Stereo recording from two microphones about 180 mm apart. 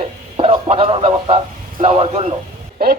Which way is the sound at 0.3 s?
30° right (ahead or behind).